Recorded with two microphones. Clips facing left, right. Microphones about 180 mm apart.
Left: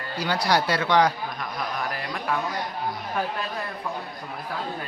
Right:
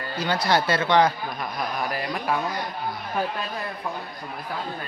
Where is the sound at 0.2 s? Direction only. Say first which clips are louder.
Right 1 dB; 10° left (ahead or behind).